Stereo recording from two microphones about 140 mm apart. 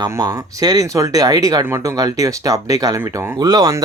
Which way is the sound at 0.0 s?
25° right (ahead or behind).